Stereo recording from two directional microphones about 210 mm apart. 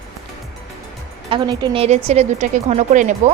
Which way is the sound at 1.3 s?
20° right (ahead or behind).